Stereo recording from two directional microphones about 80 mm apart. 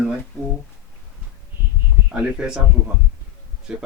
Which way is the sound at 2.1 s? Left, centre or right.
Centre.